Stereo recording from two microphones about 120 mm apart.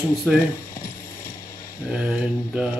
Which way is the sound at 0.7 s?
25° left (ahead or behind).